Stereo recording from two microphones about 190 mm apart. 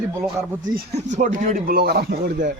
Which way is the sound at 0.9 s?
40° right (ahead or behind).